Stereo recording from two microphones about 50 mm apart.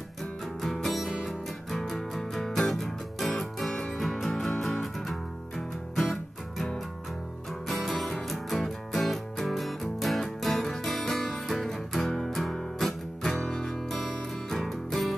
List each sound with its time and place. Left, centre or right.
0.2 s music: centre
3.7 s music: centre
4.0 s music: centre
7.6 s music: centre